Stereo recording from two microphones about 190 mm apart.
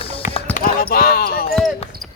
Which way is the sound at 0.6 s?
45° left (ahead or behind).